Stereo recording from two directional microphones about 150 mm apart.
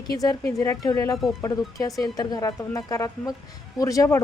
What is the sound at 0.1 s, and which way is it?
Speech, 25° left (ahead or behind).